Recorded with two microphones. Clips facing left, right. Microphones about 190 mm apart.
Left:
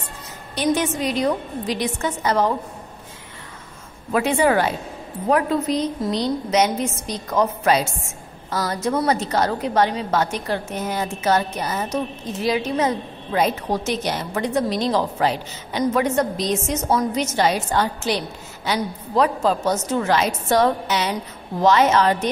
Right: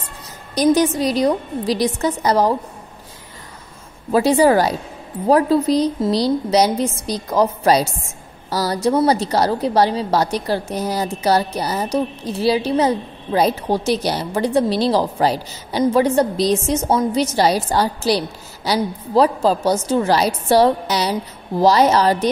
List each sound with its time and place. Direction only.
0.7 s a woman's voice: 35° right (ahead or behind)
4.1 s a woman's voice: 35° right (ahead or behind)